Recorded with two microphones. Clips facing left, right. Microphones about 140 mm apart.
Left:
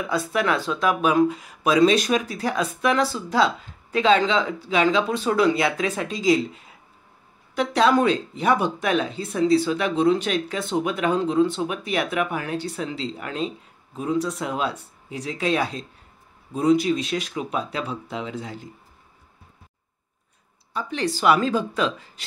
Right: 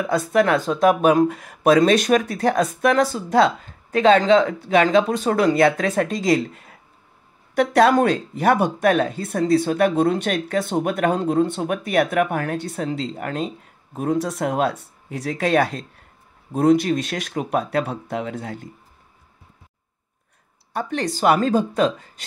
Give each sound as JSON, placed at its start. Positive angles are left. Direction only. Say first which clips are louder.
{"t": 0.1, "sound": "speech", "louder": "right 5 dB", "side_deg": -45}
{"t": 20.7, "sound": "speech", "louder": "right 2 dB", "side_deg": -50}